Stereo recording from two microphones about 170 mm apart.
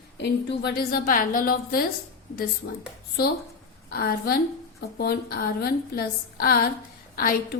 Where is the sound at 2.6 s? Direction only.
90° left.